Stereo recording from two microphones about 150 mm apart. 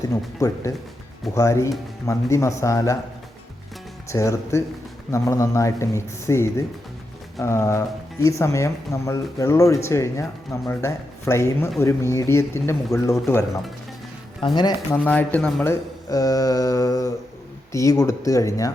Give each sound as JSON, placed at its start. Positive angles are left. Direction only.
{"t": 0.1, "sound": "speech", "side_deg": 20}
{"t": 4.1, "sound": "speech", "side_deg": 20}
{"t": 14.4, "sound": "speech", "side_deg": 30}
{"t": 14.9, "sound": "speech", "side_deg": 10}